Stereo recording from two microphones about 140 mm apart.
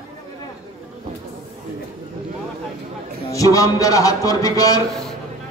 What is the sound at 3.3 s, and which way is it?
Speech, 25° left (ahead or behind).